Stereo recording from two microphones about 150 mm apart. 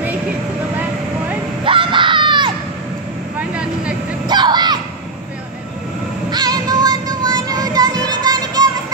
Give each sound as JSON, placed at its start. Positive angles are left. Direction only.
{"t": 1.6, "sound": "baby cry", "side_deg": -35}
{"t": 3.3, "sound": "vehicle", "side_deg": -5}
{"t": 4.3, "sound": "crowd", "side_deg": -30}
{"t": 6.3, "sound": "music", "side_deg": -25}
{"t": 8.2, "sound": "children playing", "side_deg": -25}